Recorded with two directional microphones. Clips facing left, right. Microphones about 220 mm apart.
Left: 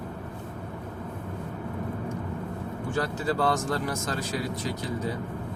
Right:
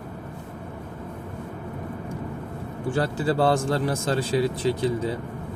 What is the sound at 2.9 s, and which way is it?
Speech, 30° right (ahead or behind).